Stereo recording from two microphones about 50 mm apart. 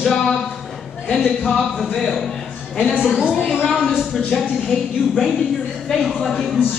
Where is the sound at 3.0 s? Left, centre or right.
Centre.